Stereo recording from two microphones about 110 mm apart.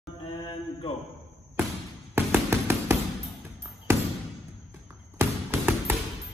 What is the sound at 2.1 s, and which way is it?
Music, 20° right (ahead or behind).